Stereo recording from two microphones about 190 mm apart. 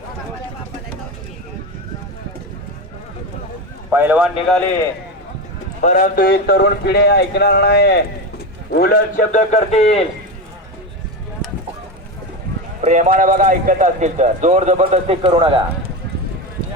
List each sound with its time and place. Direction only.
3.8 s a man's voice: 10° right (ahead or behind)
5.8 s a man's voice: 40° left (ahead or behind)
12.8 s a man's voice: 35° right (ahead or behind)